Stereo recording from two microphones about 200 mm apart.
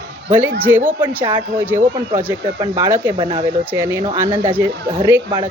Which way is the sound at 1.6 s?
10° right (ahead or behind).